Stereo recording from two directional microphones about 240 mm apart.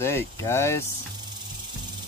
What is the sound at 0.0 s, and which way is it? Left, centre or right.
Speech, centre.